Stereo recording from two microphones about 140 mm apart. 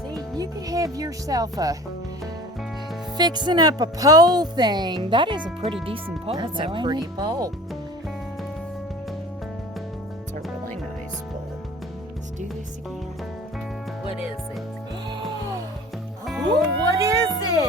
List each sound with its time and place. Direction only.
0.3 s speech: 25° right (ahead or behind)
3.2 s speech: 30° right (ahead or behind)
16.2 s music: centre (ahead or behind)
17.0 s speech: 25° right (ahead or behind)